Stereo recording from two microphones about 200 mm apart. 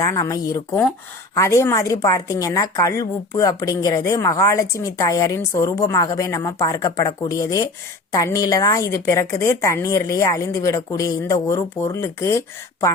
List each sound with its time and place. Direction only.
0.0 s a woman's voice: 20° left (ahead or behind)